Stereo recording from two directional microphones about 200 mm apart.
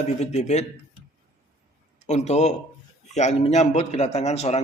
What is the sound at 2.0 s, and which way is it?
A man's voice, 35° left (ahead or behind).